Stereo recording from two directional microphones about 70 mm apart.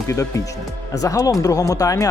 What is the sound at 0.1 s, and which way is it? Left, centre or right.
A man's voice, left.